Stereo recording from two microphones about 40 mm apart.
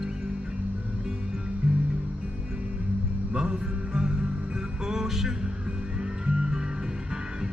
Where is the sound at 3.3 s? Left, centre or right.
Centre.